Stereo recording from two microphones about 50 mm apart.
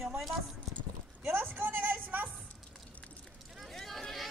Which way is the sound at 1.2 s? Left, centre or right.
Right.